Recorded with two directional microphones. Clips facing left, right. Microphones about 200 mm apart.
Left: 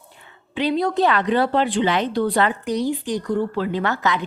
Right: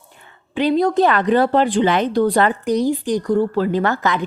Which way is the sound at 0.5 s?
45° right (ahead or behind).